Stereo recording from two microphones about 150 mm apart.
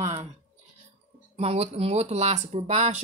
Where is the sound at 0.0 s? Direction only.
45° right (ahead or behind).